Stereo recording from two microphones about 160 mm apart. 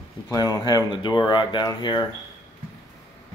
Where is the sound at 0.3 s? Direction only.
25° left (ahead or behind).